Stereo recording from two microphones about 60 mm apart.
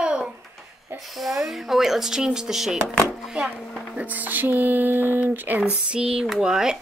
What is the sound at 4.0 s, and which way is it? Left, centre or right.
Speech, right.